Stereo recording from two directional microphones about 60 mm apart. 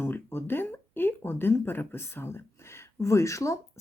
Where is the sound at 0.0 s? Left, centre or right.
Left.